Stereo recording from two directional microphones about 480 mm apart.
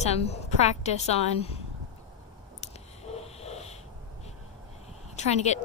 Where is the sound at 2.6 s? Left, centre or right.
Centre.